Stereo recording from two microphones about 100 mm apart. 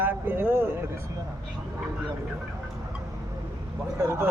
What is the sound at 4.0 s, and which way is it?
Speech, 30° right (ahead or behind).